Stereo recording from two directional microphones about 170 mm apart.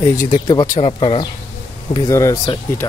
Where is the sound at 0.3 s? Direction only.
25° left (ahead or behind).